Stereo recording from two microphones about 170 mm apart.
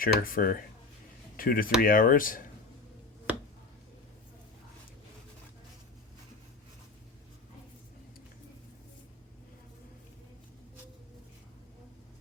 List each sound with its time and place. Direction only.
0.0 s speech: 55° left (ahead or behind)